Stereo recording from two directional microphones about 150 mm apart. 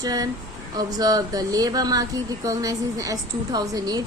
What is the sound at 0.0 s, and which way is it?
A woman's voice, 25° right (ahead or behind).